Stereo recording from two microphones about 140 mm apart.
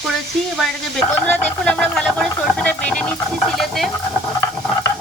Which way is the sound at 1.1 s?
10° left (ahead or behind).